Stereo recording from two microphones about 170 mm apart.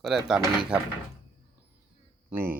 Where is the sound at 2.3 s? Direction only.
15° right (ahead or behind).